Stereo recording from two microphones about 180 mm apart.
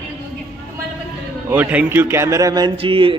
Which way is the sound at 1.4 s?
10° right (ahead or behind).